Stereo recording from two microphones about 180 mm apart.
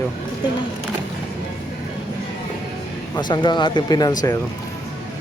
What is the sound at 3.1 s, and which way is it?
Speech, 25° left (ahead or behind).